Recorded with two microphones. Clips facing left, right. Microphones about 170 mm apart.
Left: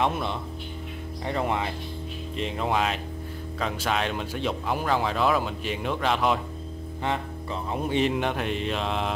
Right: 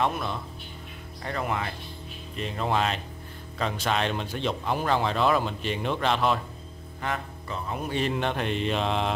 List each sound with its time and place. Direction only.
0.0 s speech: 20° left (ahead or behind)
7.0 s speech: 25° left (ahead or behind); by 9.1 s centre (ahead or behind)